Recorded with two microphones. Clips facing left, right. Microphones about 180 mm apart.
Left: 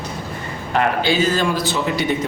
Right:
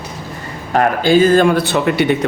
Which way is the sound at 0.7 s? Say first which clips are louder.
Right 6 dB; 45° right (ahead or behind).